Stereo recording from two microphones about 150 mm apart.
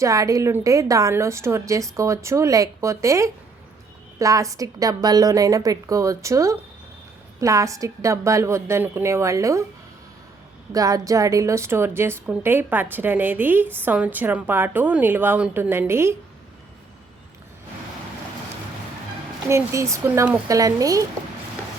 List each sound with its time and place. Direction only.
0.0 s a woman's voice: 20° right (ahead or behind)
10.7 s a woman's voice: 25° right (ahead or behind)
19.5 s a woman's voice: 20° right (ahead or behind)